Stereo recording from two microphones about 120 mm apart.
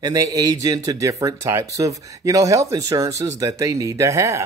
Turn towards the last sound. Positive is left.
turn(degrees=-25)  # may be behind; listen again after turning